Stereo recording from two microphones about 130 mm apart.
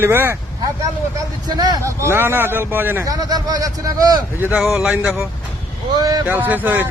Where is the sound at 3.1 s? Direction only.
30° right (ahead or behind).